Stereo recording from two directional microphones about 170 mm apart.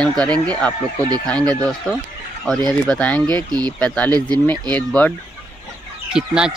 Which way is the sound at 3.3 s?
25° right (ahead or behind).